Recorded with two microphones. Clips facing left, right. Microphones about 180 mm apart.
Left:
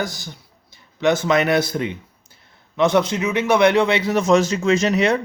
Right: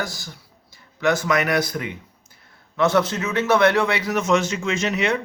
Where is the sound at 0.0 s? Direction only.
20° left (ahead or behind).